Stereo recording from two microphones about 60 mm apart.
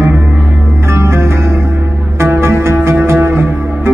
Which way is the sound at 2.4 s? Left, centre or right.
Right.